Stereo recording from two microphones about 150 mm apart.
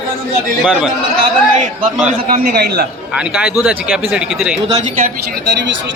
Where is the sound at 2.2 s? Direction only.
75° right (ahead or behind).